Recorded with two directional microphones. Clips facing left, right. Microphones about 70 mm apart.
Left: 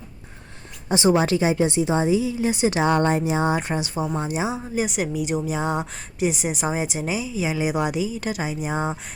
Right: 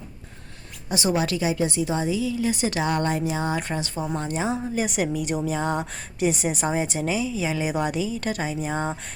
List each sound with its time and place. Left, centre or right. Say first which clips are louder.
0.9 s a woman's voice: left 5 dB; left; by 9.0 s centre